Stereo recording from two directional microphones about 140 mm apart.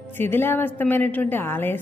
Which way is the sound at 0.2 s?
15° left (ahead or behind).